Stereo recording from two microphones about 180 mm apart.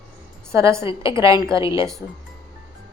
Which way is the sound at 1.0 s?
20° right (ahead or behind).